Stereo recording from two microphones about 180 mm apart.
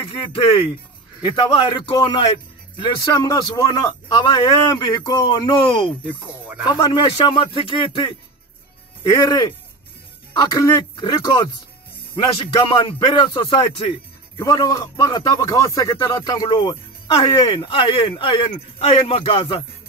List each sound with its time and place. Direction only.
0.1 s a man's voice: 30° left (ahead or behind)
12.6 s a man's voice: 25° left (ahead or behind)
14.4 s a man's voice: 20° left (ahead or behind)